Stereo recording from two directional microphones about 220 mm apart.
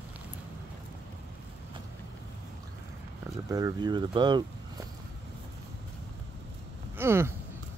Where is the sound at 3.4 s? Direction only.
15° right (ahead or behind).